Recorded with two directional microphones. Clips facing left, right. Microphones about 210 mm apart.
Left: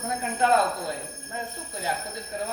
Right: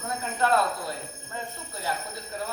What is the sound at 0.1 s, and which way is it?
Speech, 15° left (ahead or behind).